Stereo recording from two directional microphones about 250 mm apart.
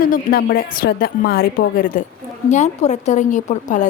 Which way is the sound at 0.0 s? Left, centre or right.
Left.